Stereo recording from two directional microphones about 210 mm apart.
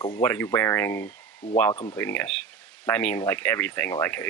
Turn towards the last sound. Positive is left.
turn(degrees=10)  # may be behind; listen again after turning